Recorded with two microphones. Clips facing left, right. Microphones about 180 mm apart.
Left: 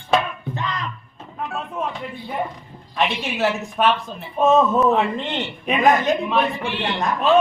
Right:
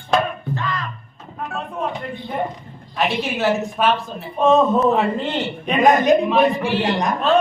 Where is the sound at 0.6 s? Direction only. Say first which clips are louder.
Left 2 dB; 20° left (ahead or behind).